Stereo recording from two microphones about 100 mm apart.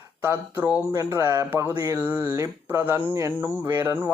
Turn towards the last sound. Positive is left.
turn(degrees=-20)  # may be behind; listen again after turning